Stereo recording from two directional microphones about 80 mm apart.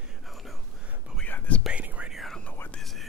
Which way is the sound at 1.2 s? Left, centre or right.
Centre.